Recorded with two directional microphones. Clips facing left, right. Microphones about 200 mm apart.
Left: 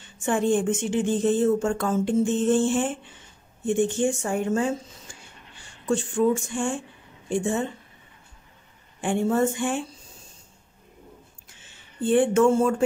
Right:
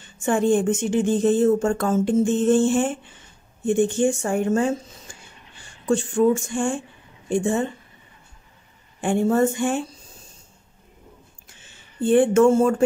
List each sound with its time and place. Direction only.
0.2 s speech: 45° right (ahead or behind)
5.9 s speech: 45° right (ahead or behind)
9.0 s a woman's voice: 40° right (ahead or behind)
12.1 s speech: 45° right (ahead or behind)